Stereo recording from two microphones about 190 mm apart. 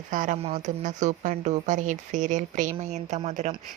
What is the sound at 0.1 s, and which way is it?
A woman's voice, 45° right (ahead or behind).